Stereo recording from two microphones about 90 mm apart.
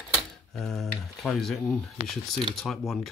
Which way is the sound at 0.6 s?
Centre (ahead or behind).